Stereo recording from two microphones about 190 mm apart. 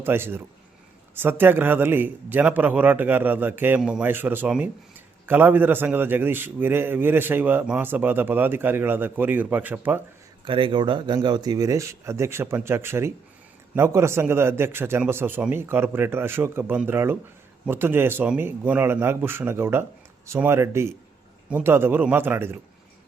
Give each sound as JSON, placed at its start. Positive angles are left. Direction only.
{"t": 0.0, "sound": "a man's voice", "side_deg": -10}
{"t": 10.4, "sound": "a man's voice", "side_deg": -25}